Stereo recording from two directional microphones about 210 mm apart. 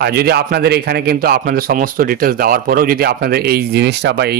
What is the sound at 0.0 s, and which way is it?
A man's voice, 50° right (ahead or behind).